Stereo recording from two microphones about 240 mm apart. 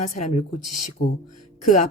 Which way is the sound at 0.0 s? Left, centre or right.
Left.